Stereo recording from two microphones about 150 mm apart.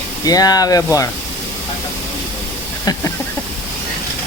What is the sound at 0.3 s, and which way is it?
Speech, 25° left (ahead or behind).